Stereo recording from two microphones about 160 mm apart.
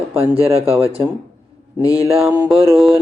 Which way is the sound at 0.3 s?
40° right (ahead or behind).